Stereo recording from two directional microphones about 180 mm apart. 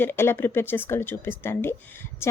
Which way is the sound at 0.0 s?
10° left (ahead or behind).